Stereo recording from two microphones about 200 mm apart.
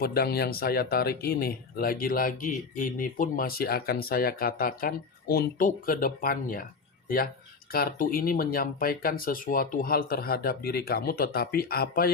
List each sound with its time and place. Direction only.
0.0 s speech: 50° left (ahead or behind)
7.7 s speech: 45° left (ahead or behind)